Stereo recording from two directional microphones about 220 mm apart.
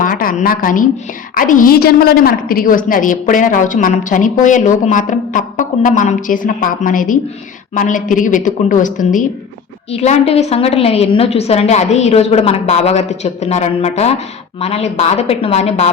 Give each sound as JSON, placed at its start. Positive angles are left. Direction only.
{"t": 0.0, "sound": "a woman's voice", "side_deg": 40}